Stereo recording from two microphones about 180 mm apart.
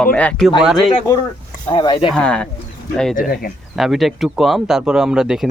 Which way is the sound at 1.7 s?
25° left (ahead or behind).